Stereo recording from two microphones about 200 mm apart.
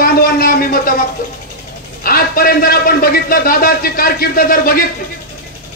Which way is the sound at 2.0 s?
45° left (ahead or behind).